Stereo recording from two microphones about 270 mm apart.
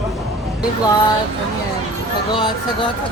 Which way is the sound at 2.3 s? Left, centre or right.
Centre.